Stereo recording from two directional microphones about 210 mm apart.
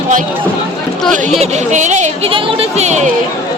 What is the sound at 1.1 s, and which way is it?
Speech, 35° right (ahead or behind).